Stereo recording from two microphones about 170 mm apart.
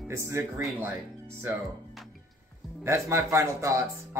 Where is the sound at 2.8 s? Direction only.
15° right (ahead or behind).